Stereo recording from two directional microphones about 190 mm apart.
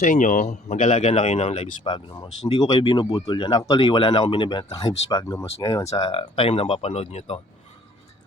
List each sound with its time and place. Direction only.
0.0 s speech: 40° left (ahead or behind)